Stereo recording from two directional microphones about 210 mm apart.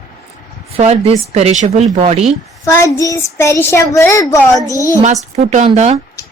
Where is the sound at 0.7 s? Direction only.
30° right (ahead or behind).